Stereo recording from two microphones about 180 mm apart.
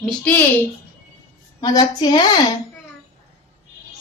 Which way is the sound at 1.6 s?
20° left (ahead or behind).